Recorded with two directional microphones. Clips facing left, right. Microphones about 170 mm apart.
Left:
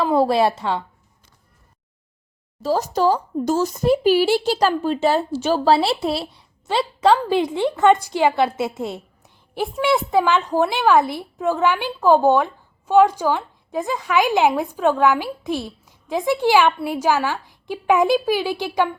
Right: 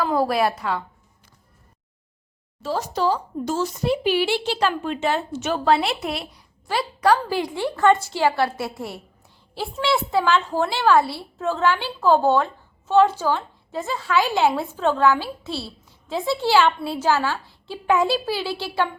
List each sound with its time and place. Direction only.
0.0 s a woman's voice: 25° left (ahead or behind)
2.6 s a woman's voice: 40° left (ahead or behind); by 18.9 s 15° left (ahead or behind)